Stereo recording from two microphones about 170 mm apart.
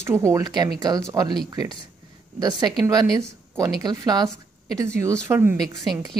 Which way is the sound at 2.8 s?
20° right (ahead or behind).